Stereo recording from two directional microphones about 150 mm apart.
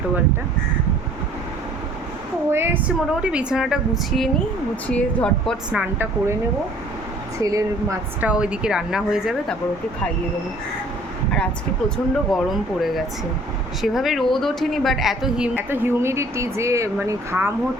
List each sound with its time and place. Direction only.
2.5 s speech: 15° right (ahead or behind); by 5.5 s 5° left (ahead or behind)
5.7 s speech: 10° right (ahead or behind)
7.4 s a woman's voice: 20° right (ahead or behind)
8.3 s speech: 5° right (ahead or behind)
12.3 s speech: centre (ahead or behind)
15.5 s speech: 15° right (ahead or behind)